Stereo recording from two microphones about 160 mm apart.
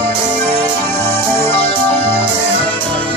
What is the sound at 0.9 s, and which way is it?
Music, 15° left (ahead or behind).